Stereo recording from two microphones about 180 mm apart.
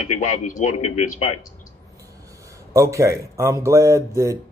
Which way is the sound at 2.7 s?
15° right (ahead or behind).